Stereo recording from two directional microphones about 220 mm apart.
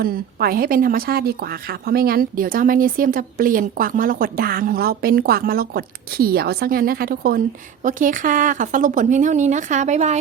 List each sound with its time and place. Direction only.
0.0 s speech: 40° right (ahead or behind)